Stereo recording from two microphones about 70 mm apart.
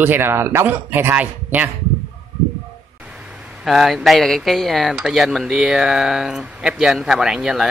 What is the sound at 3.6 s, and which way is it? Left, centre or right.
Speech, centre.